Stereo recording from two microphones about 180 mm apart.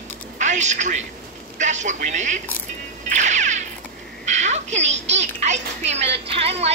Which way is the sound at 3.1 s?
40° right (ahead or behind).